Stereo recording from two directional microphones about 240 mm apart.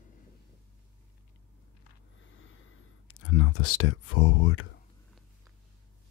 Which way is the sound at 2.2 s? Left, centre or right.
Left.